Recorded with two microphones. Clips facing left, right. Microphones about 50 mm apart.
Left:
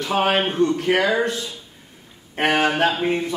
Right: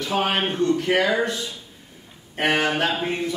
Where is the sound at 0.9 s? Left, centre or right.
Centre.